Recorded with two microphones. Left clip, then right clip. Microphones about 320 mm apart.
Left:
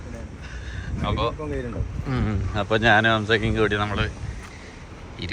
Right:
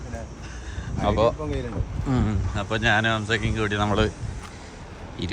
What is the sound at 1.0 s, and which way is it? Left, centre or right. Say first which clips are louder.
Speech: right 5 dB; centre.